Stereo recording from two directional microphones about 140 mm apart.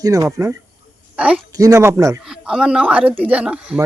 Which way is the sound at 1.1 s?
10° right (ahead or behind).